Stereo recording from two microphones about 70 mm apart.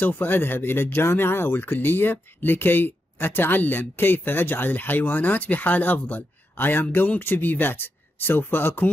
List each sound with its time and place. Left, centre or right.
0.0 s speech: left